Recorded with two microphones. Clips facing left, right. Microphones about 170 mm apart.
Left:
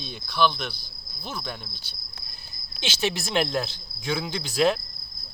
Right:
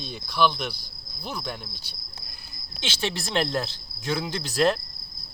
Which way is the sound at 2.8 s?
25° right (ahead or behind).